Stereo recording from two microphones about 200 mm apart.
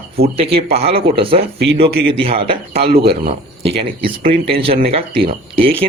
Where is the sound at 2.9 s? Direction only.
50° right (ahead or behind).